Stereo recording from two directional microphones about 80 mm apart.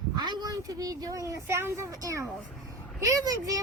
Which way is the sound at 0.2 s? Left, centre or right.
Right.